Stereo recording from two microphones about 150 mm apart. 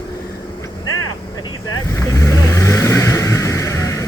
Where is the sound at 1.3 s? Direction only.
25° left (ahead or behind).